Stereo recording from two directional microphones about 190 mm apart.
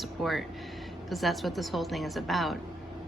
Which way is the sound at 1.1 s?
Centre (ahead or behind).